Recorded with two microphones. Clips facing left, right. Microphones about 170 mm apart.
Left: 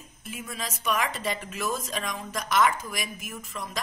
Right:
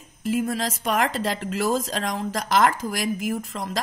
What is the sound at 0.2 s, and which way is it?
A woman's voice, 90° right.